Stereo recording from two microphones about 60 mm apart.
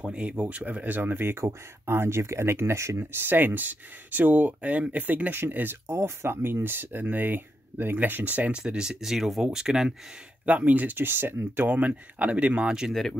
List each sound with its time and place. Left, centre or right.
0.0 s speech: centre
5.9 s speech: right; by 9.9 s centre
10.4 s speech: right
11.7 s speech: right